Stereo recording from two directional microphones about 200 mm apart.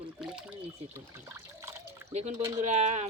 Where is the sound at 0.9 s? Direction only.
10° right (ahead or behind).